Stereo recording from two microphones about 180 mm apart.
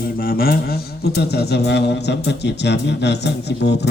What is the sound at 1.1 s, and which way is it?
A man's voice, 65° left (ahead or behind).